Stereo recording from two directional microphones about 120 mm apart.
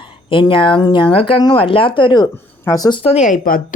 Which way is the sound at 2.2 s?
30° left (ahead or behind).